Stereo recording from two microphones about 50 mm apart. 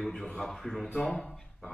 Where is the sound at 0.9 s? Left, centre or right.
Left.